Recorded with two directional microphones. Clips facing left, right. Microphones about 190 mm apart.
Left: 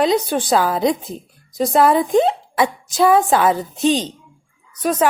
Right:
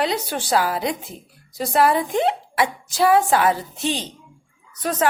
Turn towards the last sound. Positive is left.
turn(degrees=15)  # may be behind; listen again after turning